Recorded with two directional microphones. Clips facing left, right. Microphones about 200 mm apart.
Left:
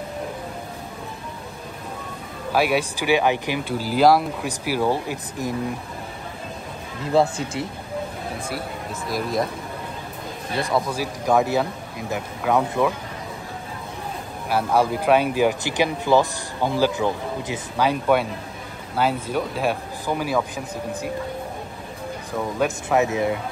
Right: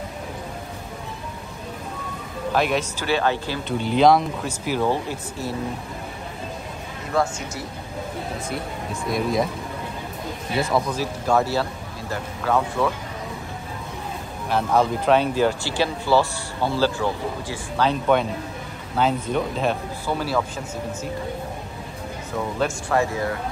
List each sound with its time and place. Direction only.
2.5 s speech: 10° left (ahead or behind)
3.7 s speech: 5° left (ahead or behind)
7.1 s speech: 30° left (ahead or behind)
8.5 s speech: centre (ahead or behind)
10.5 s speech: centre (ahead or behind)
10.9 s speech: 15° left (ahead or behind)
14.5 s speech: 10° left (ahead or behind)
22.9 s speech: 20° left (ahead or behind)